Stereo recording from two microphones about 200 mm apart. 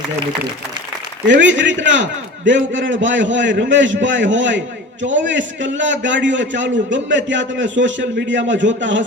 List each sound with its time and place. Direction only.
1.3 s a man's voice: 65° right (ahead or behind)